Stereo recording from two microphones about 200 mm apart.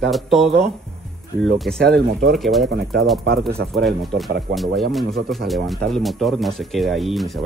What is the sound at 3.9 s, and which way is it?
Speech, centre (ahead or behind).